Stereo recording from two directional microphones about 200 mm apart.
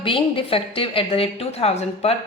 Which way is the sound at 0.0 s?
25° left (ahead or behind).